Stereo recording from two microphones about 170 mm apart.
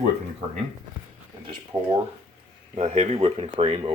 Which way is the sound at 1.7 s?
15° right (ahead or behind).